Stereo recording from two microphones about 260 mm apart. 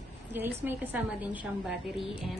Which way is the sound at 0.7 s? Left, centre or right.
Centre.